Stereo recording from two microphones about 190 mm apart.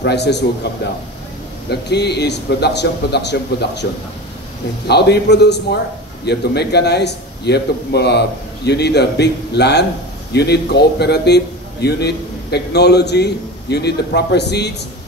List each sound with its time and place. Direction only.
0.0 s a man's voice: 60° left (ahead or behind)
4.8 s a man's voice: 60° left (ahead or behind)